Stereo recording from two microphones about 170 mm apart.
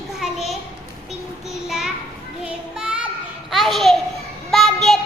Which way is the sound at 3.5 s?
Centre (ahead or behind).